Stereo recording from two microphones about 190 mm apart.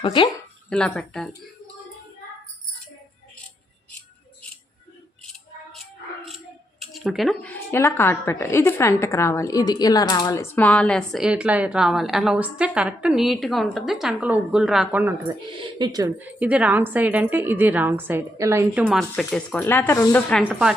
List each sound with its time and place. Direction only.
0.0 s speech: 25° left (ahead or behind)
0.7 s a woman's voice: 5° left (ahead or behind)
5.2 s music: centre (ahead or behind)
6.9 s a woman's voice: centre (ahead or behind)
15.8 s a woman's voice: 20° right (ahead or behind); by 20.5 s 10° left (ahead or behind)
20.5 s a woman's voice: 5° right (ahead or behind)